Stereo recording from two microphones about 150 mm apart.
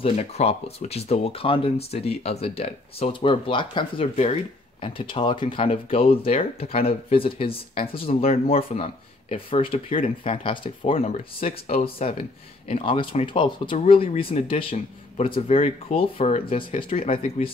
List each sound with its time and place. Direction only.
0.0 s speech: 45° left (ahead or behind)